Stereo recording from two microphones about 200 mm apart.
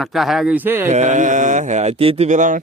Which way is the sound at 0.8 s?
35° right (ahead or behind).